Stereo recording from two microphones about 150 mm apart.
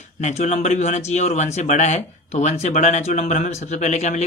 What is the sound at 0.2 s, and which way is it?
Speech, 50° left (ahead or behind).